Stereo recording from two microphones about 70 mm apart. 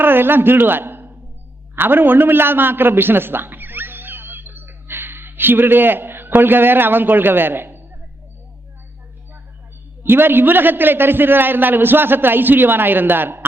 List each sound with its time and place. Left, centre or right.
0.0 s a man's voice: right
10.0 s a man's voice: right